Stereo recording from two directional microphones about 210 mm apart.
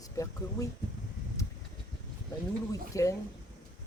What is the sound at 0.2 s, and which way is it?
Speech, 15° left (ahead or behind).